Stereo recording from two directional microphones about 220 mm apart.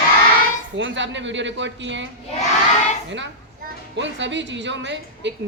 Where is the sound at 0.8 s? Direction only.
55° right (ahead or behind).